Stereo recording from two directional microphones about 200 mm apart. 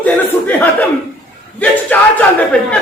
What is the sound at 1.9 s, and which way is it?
Speech, 10° left (ahead or behind).